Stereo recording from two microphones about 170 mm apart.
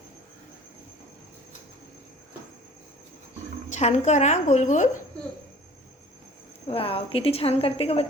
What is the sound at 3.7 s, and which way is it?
A woman's voice, 45° left (ahead or behind).